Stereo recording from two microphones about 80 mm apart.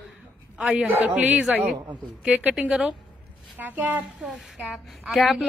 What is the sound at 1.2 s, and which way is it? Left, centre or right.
A man's voice, centre.